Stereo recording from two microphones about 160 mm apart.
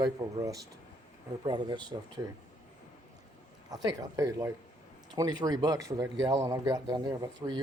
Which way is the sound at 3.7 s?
25° right (ahead or behind).